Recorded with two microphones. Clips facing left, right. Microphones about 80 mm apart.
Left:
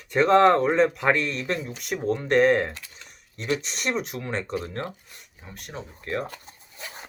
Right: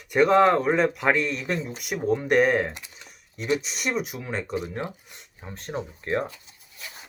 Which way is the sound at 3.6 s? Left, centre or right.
Centre.